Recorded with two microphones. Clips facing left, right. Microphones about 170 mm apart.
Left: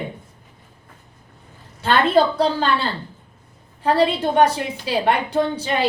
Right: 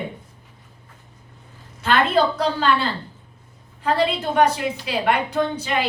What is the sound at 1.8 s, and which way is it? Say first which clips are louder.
Speech: left 2 dB; 30° left (ahead or behind).